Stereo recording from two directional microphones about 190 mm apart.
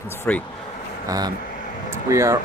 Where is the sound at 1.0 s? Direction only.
20° right (ahead or behind).